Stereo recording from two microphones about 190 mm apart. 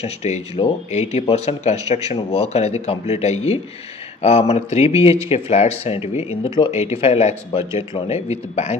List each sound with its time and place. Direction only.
0.0 s speech: 35° left (ahead or behind)